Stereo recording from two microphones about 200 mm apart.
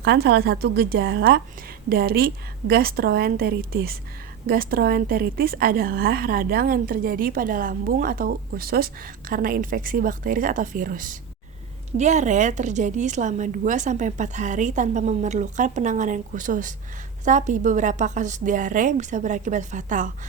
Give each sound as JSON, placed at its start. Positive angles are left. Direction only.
{"t": 0.0, "sound": "a woman's voice", "side_deg": -55}